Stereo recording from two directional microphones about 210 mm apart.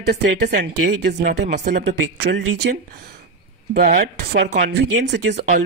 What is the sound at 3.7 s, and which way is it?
Speech, 40° right (ahead or behind).